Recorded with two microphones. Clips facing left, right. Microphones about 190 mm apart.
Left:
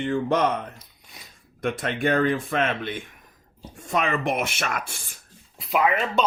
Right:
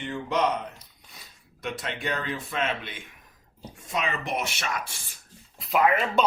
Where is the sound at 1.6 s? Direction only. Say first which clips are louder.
Left 7 dB; 50° left (ahead or behind).